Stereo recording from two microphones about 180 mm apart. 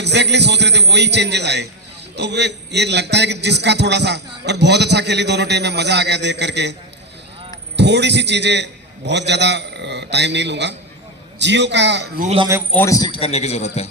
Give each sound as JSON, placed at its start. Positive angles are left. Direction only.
{"t": 0.0, "sound": "a man's voice", "side_deg": -70}
{"t": 7.8, "sound": "a man's voice", "side_deg": -75}
{"t": 12.7, "sound": "a man's voice", "side_deg": 15}
{"t": 13.1, "sound": "a man's voice", "side_deg": 30}